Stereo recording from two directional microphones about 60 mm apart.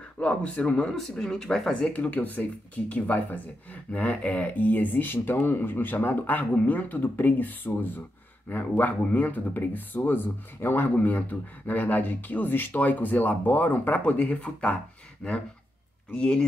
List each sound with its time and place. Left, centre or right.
0.2 s speech: left
0.9 s speech: centre
1.7 s speech: left